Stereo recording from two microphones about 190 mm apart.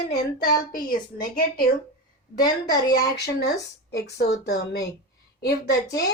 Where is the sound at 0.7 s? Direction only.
50° left (ahead or behind).